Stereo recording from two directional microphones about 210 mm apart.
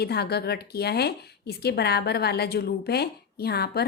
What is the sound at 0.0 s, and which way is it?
Speech, 50° left (ahead or behind).